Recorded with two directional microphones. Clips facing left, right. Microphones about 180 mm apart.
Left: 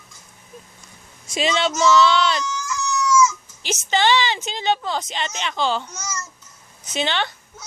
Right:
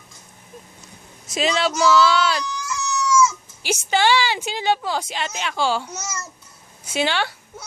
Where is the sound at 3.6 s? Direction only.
10° right (ahead or behind).